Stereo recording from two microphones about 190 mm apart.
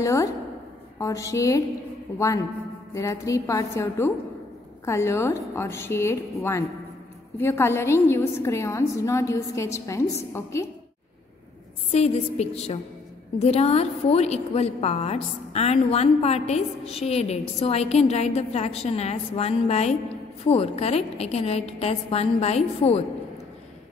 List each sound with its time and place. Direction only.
0.0 s a woman's voice: 15° left (ahead or behind)
11.9 s a woman's voice: 35° left (ahead or behind)